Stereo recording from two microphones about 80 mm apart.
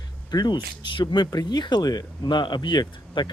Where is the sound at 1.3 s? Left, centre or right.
Left.